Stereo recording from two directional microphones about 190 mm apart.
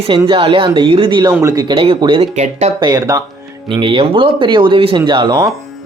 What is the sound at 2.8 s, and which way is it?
Speech, 20° right (ahead or behind).